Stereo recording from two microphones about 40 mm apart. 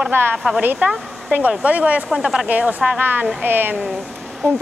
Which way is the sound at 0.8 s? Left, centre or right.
Right.